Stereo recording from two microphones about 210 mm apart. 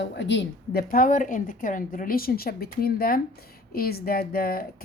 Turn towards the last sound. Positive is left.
turn(degrees=45)  # may be behind; listen again after turning